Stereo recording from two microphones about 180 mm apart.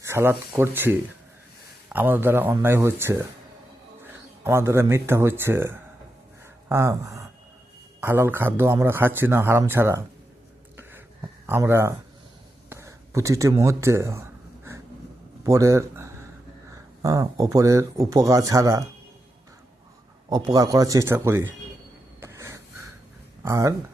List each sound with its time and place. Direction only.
0.0 s a man's voice: 15° right (ahead or behind)
10.8 s a sound: 10° right (ahead or behind)
13.6 s gasp: 15° right (ahead or behind)
15.4 s a man's voice: 15° right (ahead or behind)
20.3 s speech: 20° right (ahead or behind)
22.2 s wheeze: 15° right (ahead or behind)
23.4 s speech: 15° right (ahead or behind)